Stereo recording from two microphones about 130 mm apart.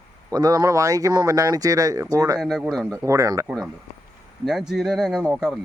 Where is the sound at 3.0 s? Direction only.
25° right (ahead or behind).